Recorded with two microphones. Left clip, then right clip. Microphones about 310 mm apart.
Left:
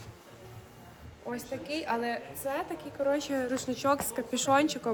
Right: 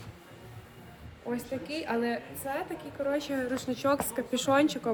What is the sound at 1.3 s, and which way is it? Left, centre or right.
A woman's voice, centre.